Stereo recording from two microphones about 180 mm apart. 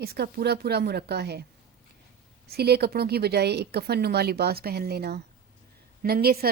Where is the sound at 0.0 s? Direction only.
60° right (ahead or behind).